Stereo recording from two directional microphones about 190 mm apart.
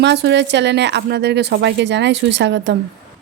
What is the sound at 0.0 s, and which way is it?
A woman's voice, 65° right (ahead or behind).